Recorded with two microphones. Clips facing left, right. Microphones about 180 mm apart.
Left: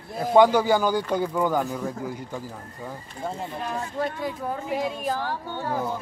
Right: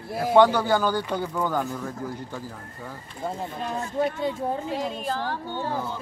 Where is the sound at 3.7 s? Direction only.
25° right (ahead or behind).